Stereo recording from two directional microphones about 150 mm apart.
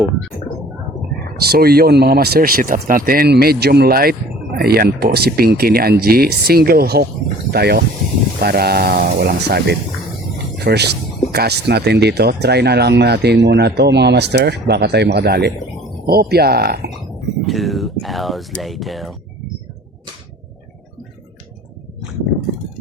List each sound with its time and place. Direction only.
1.5 s speech: 90° right
17.4 s speech: centre (ahead or behind)